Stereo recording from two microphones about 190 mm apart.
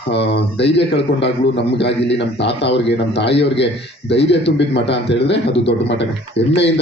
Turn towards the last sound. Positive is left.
turn(degrees=65)  # may be behind; listen again after turning